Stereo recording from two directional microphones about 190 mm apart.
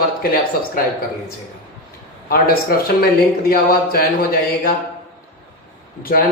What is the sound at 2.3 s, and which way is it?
Speech, 50° left (ahead or behind).